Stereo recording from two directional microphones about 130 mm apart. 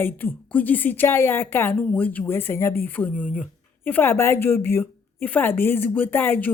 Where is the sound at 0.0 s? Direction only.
15° left (ahead or behind).